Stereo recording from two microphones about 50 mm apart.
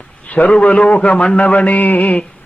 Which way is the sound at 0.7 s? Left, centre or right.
Left.